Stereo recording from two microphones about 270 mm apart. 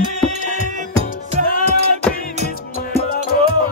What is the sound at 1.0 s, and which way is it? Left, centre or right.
Music, left.